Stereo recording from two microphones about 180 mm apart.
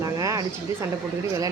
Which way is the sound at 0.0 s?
20° right (ahead or behind).